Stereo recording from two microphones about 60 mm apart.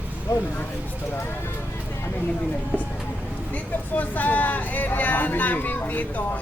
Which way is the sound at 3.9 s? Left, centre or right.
Left.